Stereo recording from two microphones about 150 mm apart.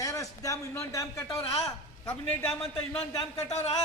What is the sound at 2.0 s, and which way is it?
A man's voice, 10° left (ahead or behind).